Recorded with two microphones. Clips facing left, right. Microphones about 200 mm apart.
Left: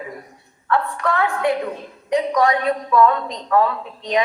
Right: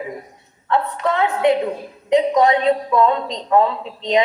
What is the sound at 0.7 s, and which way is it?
A woman's voice, 20° right (ahead or behind).